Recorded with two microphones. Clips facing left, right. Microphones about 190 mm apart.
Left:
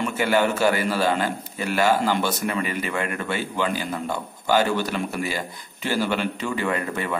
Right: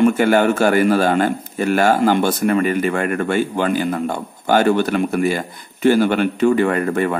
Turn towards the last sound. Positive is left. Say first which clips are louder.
# right 8 dB
turn(degrees=-50)  # may be behind; listen again after turning